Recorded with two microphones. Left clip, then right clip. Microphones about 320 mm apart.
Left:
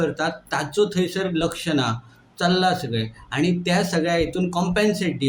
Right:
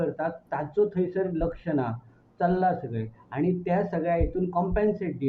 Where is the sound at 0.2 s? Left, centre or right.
Right.